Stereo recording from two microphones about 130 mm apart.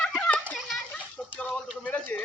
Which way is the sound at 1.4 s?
10° left (ahead or behind).